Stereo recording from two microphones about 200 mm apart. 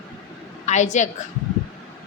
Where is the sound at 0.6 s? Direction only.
35° left (ahead or behind).